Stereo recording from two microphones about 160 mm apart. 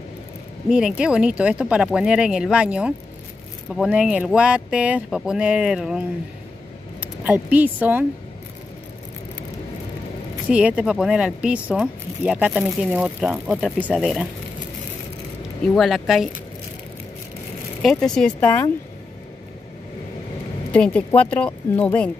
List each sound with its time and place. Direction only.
0.7 s speech: 5° right (ahead or behind)
10.5 s speech: 5° right (ahead or behind)
15.7 s speech: centre (ahead or behind)
17.8 s speech: 5° left (ahead or behind)
20.7 s speech: 10° left (ahead or behind)